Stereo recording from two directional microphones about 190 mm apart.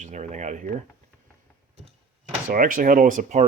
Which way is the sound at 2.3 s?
45° right (ahead or behind).